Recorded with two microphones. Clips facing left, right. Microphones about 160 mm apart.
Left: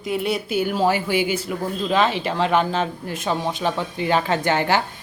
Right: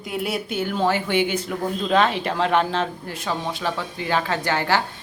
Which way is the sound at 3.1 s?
20° left (ahead or behind).